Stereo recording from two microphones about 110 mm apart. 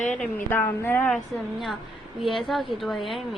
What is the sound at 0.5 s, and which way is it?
Speech, 20° left (ahead or behind).